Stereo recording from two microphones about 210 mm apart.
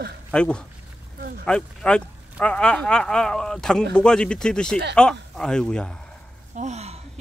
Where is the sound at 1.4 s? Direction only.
5° left (ahead or behind).